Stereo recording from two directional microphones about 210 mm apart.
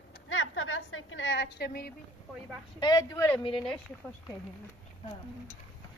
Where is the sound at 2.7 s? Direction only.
20° left (ahead or behind).